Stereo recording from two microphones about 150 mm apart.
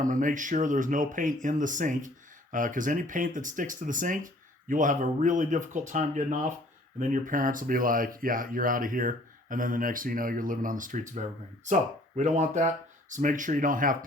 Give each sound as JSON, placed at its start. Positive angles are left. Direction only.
{"t": 0.0, "sound": "speech", "side_deg": -60}